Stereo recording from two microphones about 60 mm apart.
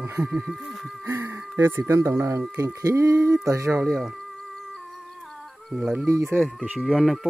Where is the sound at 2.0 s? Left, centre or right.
Right.